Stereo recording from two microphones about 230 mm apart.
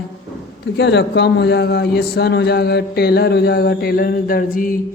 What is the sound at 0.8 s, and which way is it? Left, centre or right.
A man's voice, left.